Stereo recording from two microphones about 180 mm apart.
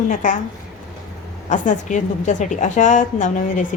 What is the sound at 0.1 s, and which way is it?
Speech, 45° left (ahead or behind).